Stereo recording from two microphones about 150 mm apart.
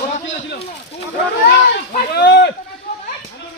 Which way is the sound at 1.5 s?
80° left.